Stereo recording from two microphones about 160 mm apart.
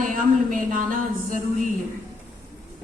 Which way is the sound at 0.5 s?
60° right (ahead or behind).